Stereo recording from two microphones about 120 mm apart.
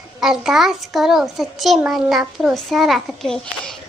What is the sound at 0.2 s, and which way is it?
A child's voice, 5° right (ahead or behind).